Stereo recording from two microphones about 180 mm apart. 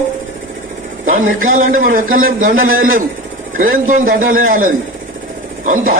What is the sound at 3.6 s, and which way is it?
A man's voice, 50° right (ahead or behind).